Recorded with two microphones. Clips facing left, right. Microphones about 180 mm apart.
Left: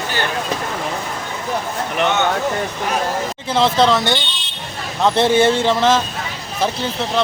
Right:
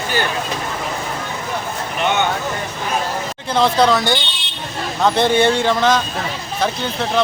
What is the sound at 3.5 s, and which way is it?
Speech, centre (ahead or behind).